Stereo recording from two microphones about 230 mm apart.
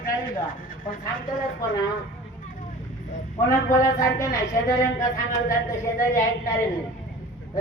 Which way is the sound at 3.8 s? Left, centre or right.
Centre.